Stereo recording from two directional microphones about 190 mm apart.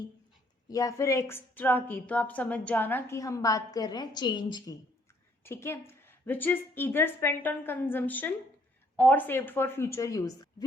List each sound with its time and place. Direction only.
0.7 s a woman's voice: 20° left (ahead or behind)